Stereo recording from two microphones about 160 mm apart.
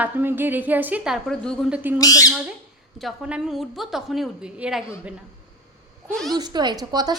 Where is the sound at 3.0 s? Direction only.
5° right (ahead or behind).